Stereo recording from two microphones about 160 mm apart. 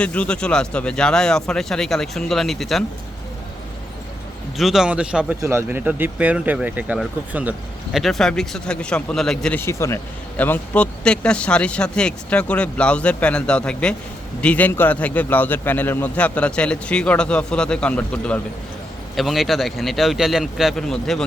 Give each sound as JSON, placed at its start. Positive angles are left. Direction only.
{"t": 0.0, "sound": "speech", "side_deg": 5}
{"t": 4.5, "sound": "speech", "side_deg": 0}